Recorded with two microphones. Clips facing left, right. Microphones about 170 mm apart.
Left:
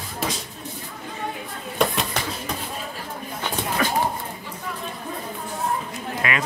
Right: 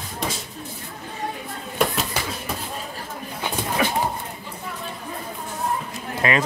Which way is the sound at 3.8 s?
15° right (ahead or behind).